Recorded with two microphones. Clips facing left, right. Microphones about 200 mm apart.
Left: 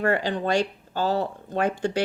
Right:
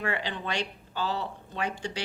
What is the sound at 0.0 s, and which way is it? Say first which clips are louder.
Speech: left 9 dB; 45° left (ahead or behind).